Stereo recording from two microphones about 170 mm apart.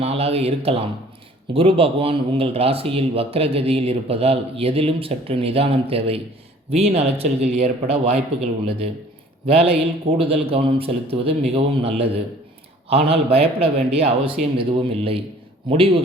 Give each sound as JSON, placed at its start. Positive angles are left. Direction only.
{"t": 0.0, "sound": "speech", "side_deg": -35}
{"t": 9.5, "sound": "speech", "side_deg": -35}